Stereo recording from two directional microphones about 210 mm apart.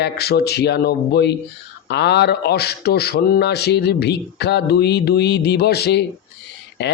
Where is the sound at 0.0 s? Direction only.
50° left (ahead or behind).